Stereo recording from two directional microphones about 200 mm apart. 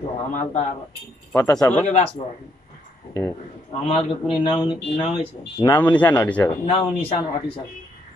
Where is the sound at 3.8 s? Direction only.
30° left (ahead or behind).